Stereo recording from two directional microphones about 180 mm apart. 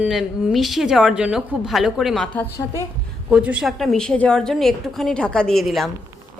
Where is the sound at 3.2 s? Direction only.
5° right (ahead or behind).